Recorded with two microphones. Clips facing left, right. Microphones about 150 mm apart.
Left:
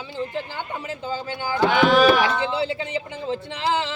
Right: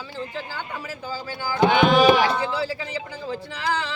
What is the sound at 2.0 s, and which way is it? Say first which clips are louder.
Speech: even; 20° right (ahead or behind).